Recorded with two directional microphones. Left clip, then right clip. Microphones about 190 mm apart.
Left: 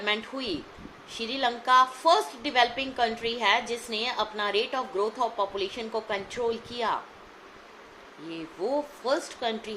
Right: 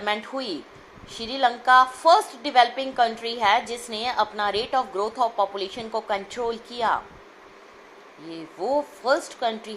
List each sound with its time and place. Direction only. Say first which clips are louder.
0.0 s a woman's voice: right 3 dB; 20° right (ahead or behind)
8.3 s a woman's voice: right 4 dB; 20° right (ahead or behind)